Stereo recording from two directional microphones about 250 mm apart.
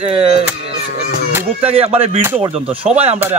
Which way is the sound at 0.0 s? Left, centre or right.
Right.